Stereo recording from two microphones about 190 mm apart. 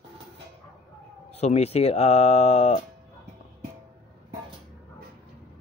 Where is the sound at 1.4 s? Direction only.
35° left (ahead or behind).